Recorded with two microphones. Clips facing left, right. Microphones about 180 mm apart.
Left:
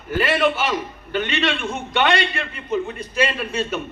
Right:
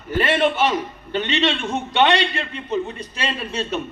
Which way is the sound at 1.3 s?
25° right (ahead or behind).